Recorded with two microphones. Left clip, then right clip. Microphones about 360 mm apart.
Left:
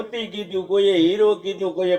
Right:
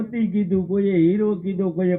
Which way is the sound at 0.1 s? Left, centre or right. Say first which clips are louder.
Right 2 dB; left.